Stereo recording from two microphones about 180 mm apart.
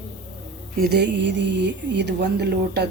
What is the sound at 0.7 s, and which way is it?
A woman's voice, 60° right (ahead or behind).